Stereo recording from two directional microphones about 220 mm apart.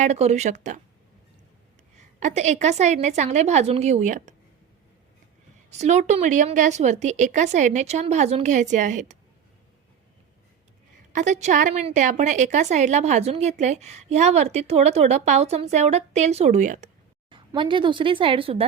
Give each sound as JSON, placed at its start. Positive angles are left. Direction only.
{"t": 0.0, "sound": "a woman's voice", "side_deg": -30}
{"t": 2.0, "sound": "a woman's voice", "side_deg": -30}
{"t": 5.7, "sound": "a woman's voice", "side_deg": -30}
{"t": 11.1, "sound": "a woman's voice", "side_deg": -35}
{"t": 17.2, "sound": "speech", "side_deg": -20}